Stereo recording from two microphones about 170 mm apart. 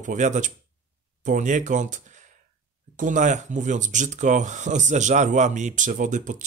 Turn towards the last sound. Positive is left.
turn(degrees=-45)  # may be behind; listen again after turning